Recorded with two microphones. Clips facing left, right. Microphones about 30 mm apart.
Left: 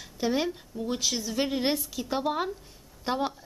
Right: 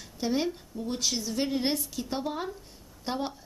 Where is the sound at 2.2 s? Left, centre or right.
Left.